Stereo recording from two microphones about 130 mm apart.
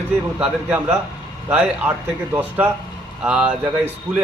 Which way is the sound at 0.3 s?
10° right (ahead or behind).